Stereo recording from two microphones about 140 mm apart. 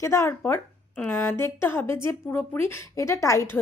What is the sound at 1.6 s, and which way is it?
A woman's voice, 15° left (ahead or behind).